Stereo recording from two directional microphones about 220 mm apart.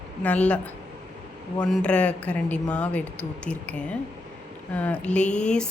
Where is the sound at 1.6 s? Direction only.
5° left (ahead or behind).